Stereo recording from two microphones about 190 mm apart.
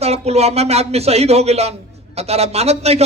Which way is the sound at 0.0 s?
35° right (ahead or behind).